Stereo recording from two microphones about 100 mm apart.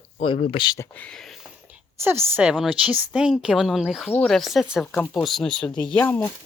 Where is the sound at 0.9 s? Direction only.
10° left (ahead or behind).